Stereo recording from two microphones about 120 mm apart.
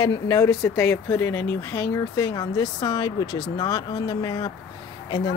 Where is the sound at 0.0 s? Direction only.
35° left (ahead or behind).